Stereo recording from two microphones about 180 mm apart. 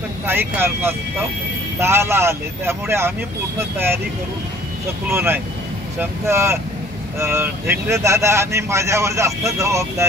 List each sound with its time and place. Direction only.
0.3 s speech: 10° right (ahead or behind)
5.0 s speech: 10° right (ahead or behind)